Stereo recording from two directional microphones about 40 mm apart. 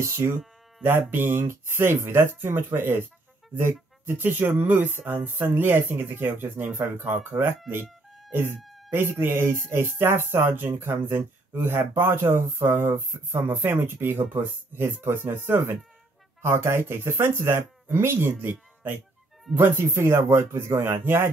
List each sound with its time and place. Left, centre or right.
0.1 s speech: right
0.8 s speech: right
2.3 s speech: right
5.7 s speech: right
16.4 s speech: right
19.5 s speech: right